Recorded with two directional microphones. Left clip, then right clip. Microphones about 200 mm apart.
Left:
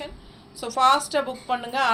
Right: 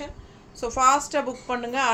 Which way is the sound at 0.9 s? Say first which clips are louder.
Left 1 dB; 20° right (ahead or behind).